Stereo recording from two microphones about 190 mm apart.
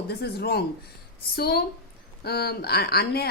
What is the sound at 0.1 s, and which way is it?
Speech, 55° left (ahead or behind).